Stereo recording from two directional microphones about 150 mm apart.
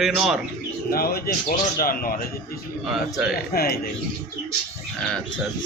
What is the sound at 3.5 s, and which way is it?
Speech, 90° left.